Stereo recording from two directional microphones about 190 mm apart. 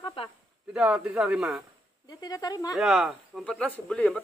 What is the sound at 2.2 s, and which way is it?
Speech, 20° left (ahead or behind).